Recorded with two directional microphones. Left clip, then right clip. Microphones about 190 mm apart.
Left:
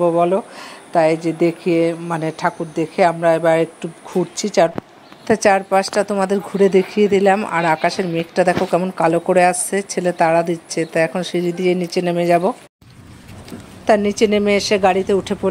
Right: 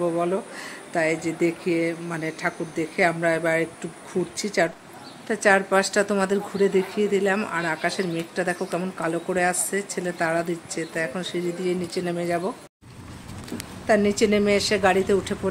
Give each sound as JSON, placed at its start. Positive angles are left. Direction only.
{"t": 0.0, "sound": "a woman's voice", "side_deg": 20}
{"t": 13.8, "sound": "speech", "side_deg": 35}